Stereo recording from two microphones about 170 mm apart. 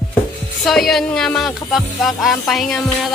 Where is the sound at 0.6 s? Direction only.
Centre (ahead or behind).